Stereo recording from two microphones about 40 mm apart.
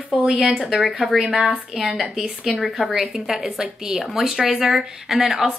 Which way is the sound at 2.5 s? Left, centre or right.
Centre.